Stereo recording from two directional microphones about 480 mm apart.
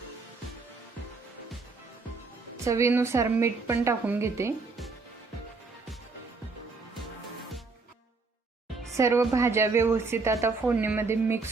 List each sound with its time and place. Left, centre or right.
2.6 s a woman's voice: centre
9.0 s a woman's voice: centre